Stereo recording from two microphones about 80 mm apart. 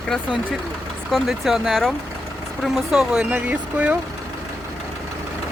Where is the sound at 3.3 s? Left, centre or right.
Centre.